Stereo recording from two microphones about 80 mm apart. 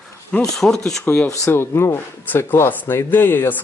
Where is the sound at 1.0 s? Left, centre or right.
Left.